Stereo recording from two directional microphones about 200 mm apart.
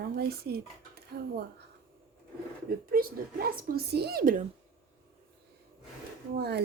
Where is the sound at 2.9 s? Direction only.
45° right (ahead or behind).